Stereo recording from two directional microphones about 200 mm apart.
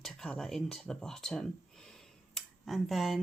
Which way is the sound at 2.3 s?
Centre (ahead or behind).